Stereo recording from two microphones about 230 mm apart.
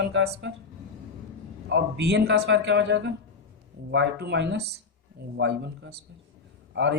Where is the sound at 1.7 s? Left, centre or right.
Right.